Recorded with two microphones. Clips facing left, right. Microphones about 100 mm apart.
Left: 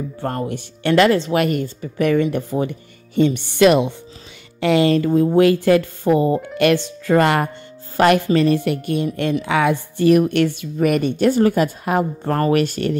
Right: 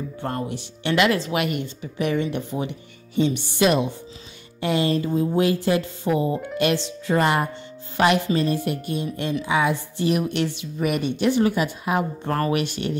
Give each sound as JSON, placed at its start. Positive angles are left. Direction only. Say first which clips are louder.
{"t": 0.2, "sound": "a woman's voice", "louder": "left 4 dB", "side_deg": 45}
{"t": 3.2, "sound": "a woman's voice", "louder": "left 6 dB", "side_deg": 55}